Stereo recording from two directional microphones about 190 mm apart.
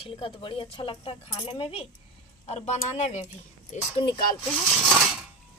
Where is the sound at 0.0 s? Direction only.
30° left (ahead or behind).